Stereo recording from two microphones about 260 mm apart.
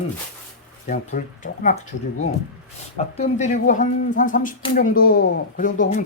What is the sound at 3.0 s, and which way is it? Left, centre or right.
Speech, left.